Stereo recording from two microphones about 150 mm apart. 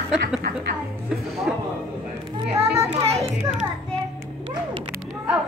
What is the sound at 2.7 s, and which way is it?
Speech, 40° right (ahead or behind).